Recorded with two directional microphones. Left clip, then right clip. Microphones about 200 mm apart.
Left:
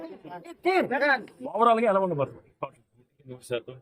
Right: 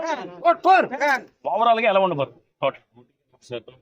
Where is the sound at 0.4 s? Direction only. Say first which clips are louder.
Right 10 dB; 40° right (ahead or behind).